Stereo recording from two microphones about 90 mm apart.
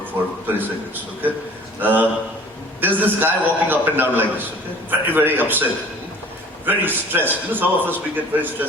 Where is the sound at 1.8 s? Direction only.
20° right (ahead or behind).